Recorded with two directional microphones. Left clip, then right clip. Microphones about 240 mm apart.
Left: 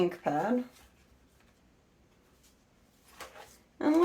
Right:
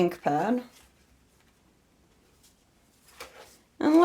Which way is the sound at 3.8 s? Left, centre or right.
Right.